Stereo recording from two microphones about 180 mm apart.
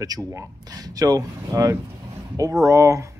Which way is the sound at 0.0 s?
20° right (ahead or behind).